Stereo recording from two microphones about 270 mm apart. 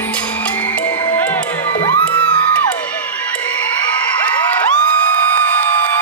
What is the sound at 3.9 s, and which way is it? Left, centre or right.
Cheering, centre.